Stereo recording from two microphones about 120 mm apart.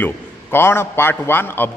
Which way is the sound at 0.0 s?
20° left (ahead or behind).